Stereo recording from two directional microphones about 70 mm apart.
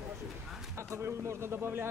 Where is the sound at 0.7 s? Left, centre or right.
Right.